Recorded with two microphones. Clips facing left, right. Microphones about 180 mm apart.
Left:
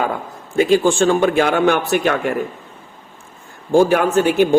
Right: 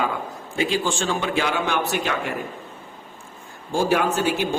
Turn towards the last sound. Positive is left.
turn(degrees=55)  # may be behind; listen again after turning